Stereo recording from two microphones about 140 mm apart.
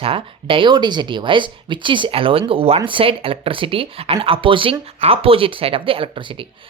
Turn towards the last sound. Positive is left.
turn(degrees=-35)  # may be behind; listen again after turning